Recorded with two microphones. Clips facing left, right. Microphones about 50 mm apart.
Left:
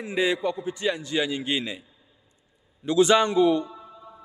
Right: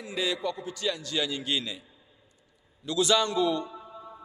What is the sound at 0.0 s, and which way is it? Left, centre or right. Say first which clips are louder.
A man's voice: left 6 dB; left.